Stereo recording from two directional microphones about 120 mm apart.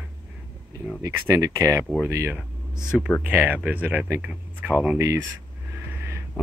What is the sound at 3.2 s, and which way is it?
Speech, 15° right (ahead or behind).